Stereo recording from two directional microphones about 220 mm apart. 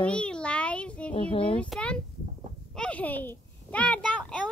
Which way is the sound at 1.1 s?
25° left (ahead or behind).